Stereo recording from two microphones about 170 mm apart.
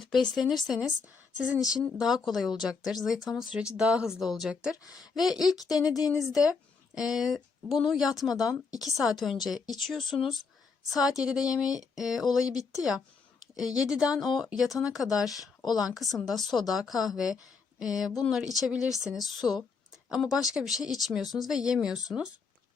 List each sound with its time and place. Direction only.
0.0 s speech: centre (ahead or behind)
4.9 s speech: 20° left (ahead or behind)
6.1 s a woman's voice: 5° right (ahead or behind)